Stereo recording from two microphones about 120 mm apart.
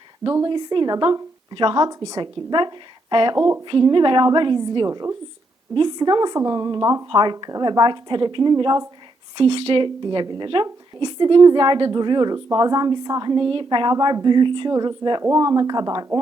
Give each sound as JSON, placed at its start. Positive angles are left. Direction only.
{"t": 0.3, "sound": "speech", "side_deg": -35}
{"t": 3.3, "sound": "a sound", "side_deg": -30}
{"t": 3.7, "sound": "speech", "side_deg": -40}
{"t": 4.9, "sound": "a sound", "side_deg": -30}
{"t": 5.7, "sound": "speech", "side_deg": -40}
{"t": 7.1, "sound": "speech", "side_deg": -40}
{"t": 9.4, "sound": "speech", "side_deg": -50}